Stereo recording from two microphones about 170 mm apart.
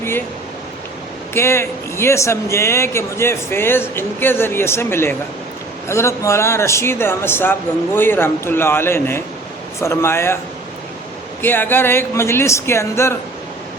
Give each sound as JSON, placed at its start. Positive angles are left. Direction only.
{"t": 1.3, "sound": "a man's voice", "side_deg": 15}
{"t": 11.4, "sound": "a man's voice", "side_deg": 10}